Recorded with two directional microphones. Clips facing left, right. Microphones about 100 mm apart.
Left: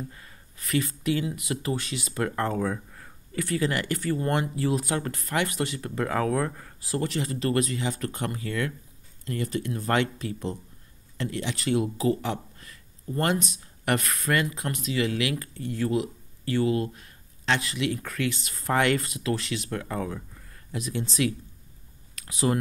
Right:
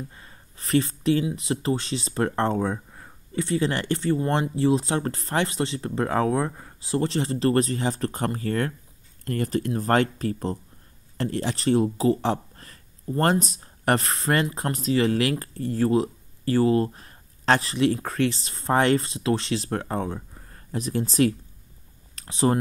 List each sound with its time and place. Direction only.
0.1 s speech: 30° right (ahead or behind)